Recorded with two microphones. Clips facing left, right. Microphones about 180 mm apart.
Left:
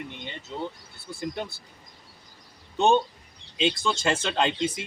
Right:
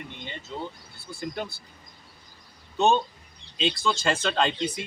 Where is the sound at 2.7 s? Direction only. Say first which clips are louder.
Left 1 dB; 15° left (ahead or behind).